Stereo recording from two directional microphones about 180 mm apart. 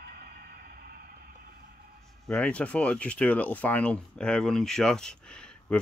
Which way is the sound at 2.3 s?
5° left (ahead or behind).